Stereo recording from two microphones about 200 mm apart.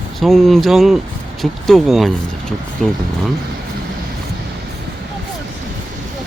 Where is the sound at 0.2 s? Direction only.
Centre (ahead or behind).